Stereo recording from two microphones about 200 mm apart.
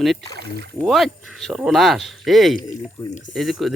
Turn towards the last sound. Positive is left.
turn(degrees=0)  # may be behind; listen again after turning